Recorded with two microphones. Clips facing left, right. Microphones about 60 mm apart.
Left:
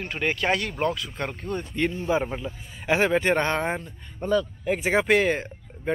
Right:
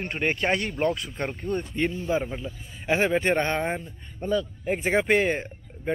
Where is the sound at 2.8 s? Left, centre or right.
Centre.